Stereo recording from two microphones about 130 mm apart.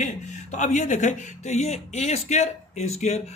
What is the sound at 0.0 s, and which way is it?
Speech, 70° left (ahead or behind).